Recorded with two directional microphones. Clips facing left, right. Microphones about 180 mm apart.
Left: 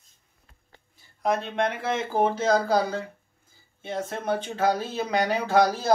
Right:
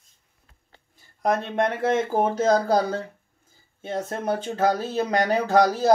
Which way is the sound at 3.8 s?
40° right (ahead or behind).